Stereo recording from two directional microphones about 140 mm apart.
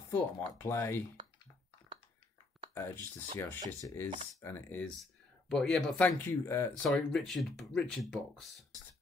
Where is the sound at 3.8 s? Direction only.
25° left (ahead or behind).